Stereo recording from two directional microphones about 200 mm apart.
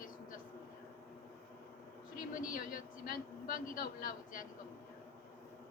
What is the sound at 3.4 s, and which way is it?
Speech, 45° left (ahead or behind).